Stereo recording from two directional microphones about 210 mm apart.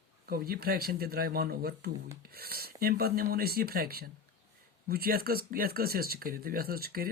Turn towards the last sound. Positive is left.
turn(degrees=-45)  # may be behind; listen again after turning